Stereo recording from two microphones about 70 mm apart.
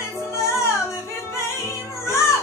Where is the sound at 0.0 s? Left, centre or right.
Left.